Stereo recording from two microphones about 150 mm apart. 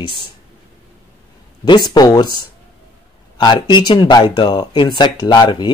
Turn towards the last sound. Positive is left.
turn(degrees=30)  # may be behind; listen again after turning